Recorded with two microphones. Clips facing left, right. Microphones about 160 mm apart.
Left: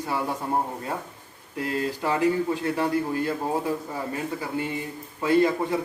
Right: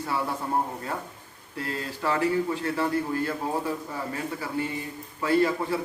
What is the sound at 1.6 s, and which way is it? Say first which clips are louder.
A man's voice: left 5 dB; 15° left (ahead or behind).